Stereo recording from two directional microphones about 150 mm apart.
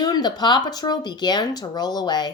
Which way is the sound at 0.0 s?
25° left (ahead or behind).